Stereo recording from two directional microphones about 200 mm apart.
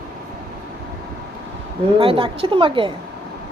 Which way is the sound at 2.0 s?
25° right (ahead or behind).